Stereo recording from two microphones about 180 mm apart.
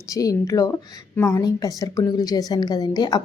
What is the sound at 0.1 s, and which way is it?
A woman's voice, 20° left (ahead or behind).